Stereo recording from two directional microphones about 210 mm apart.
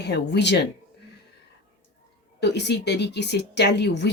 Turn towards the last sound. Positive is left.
turn(degrees=55)  # may be behind; listen again after turning